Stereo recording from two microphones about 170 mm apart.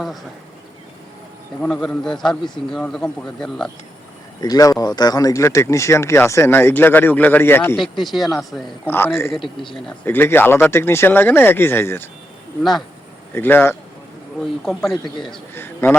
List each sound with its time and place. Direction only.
1.6 s a man's voice: 5° left (ahead or behind)
4.4 s speech: 20° left (ahead or behind)
7.8 s a man's voice: centre (ahead or behind)
8.9 s speech: 15° left (ahead or behind)
13.3 s speech: 10° left (ahead or behind)
14.4 s a man's voice: centre (ahead or behind)
15.5 s a man's voice: 15° left (ahead or behind)